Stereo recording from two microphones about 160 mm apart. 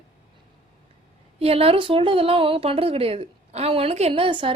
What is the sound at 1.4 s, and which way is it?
Speech, 35° right (ahead or behind).